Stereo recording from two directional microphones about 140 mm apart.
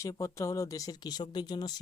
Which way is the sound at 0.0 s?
20° left (ahead or behind).